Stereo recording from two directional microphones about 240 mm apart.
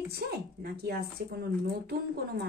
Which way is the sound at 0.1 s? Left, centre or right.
Right.